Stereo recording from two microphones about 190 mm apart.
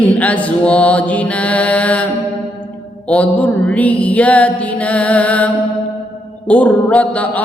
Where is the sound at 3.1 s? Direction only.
5° left (ahead or behind).